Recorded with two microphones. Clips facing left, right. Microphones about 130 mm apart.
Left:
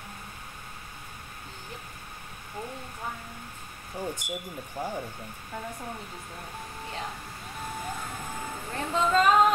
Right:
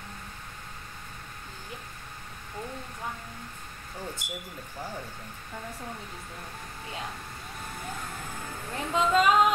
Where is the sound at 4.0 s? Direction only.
15° left (ahead or behind).